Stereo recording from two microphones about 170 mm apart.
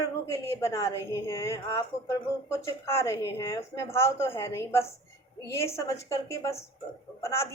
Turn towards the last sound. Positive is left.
turn(degrees=15)  # may be behind; listen again after turning